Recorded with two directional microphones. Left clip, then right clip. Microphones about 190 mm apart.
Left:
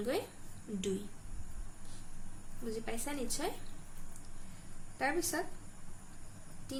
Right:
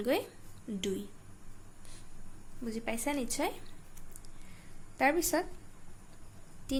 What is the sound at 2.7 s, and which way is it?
Speech, 55° right (ahead or behind).